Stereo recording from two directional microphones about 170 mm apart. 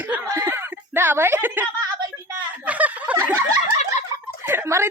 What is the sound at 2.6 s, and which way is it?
Snicker, 10° right (ahead or behind).